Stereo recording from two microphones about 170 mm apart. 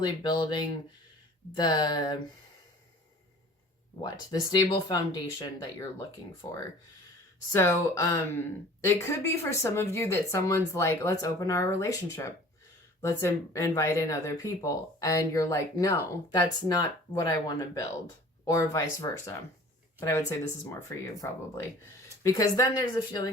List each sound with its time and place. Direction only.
0.0 s speech: 25° left (ahead or behind)
4.0 s speech: 25° left (ahead or behind)
7.5 s speech: 15° left (ahead or behind)